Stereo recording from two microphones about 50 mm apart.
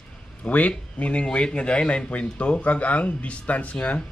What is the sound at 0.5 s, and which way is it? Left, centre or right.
A man's voice, left.